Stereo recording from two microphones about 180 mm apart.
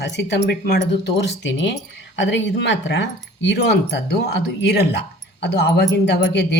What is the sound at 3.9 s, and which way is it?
Speech, 70° left (ahead or behind).